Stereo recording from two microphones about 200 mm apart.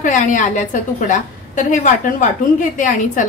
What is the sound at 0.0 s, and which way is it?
A woman's voice, 40° left (ahead or behind).